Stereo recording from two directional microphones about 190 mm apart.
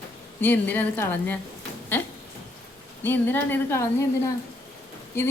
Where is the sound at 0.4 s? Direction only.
10° left (ahead or behind).